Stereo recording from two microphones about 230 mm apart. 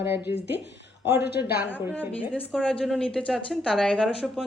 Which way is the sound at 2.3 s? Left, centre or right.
Centre.